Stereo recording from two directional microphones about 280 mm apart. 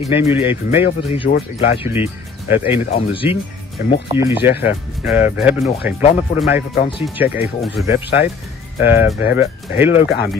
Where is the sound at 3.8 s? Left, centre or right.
Left.